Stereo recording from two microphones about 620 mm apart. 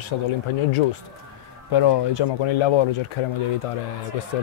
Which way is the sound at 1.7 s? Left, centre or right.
Left.